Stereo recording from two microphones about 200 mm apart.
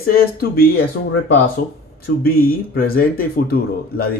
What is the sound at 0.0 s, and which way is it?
Speech, 50° left (ahead or behind).